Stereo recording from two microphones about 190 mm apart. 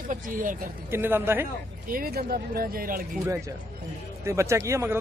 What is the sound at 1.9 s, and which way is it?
Speech, 50° right (ahead or behind).